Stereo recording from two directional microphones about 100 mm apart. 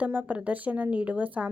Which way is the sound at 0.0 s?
15° right (ahead or behind).